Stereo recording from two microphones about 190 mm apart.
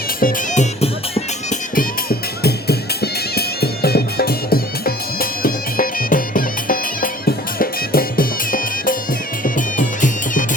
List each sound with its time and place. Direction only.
0.2 s music: 45° left (ahead or behind)
1.7 s music: 50° left (ahead or behind)